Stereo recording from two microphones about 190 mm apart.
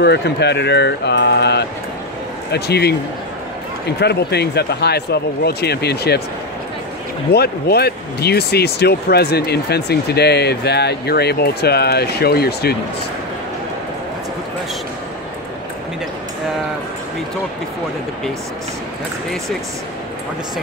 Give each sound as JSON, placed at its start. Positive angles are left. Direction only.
{"t": 0.0, "sound": "speech", "side_deg": 60}
{"t": 4.0, "sound": "speech", "side_deg": 60}
{"t": 7.3, "sound": "speech", "side_deg": 55}